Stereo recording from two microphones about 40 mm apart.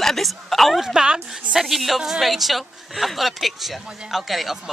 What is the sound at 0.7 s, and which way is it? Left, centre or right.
A woman's voice, centre.